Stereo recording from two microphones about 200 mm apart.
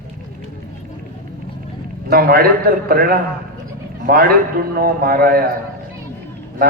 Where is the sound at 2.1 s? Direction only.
50° right (ahead or behind).